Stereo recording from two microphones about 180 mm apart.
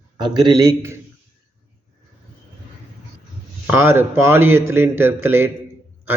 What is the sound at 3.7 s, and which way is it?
Speech, 10° right (ahead or behind).